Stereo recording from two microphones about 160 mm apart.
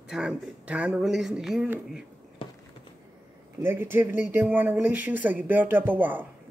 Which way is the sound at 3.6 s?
15° right (ahead or behind).